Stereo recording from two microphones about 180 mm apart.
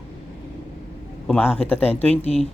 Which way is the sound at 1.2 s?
5° left (ahead or behind).